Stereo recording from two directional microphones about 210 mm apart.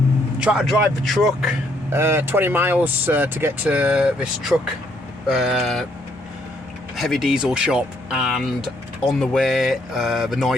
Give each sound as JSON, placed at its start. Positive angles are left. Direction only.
{"t": 0.3, "sound": "speech", "side_deg": -5}
{"t": 6.9, "sound": "speech", "side_deg": 0}